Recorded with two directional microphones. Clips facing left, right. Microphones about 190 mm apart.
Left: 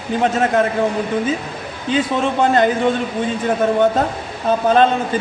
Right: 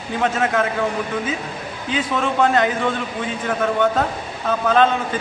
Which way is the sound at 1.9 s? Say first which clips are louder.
Left 4 dB; 30° left (ahead or behind).